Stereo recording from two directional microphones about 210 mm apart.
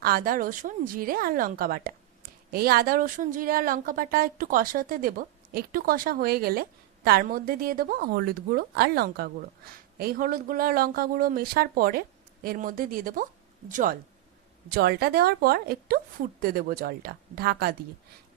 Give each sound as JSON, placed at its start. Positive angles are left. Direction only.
{"t": 0.0, "sound": "speech", "side_deg": -45}